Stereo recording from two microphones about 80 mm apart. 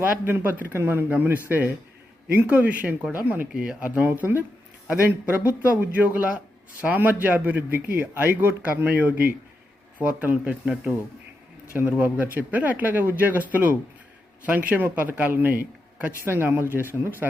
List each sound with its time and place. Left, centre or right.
0.0 s speech: right
3.5 s speech: centre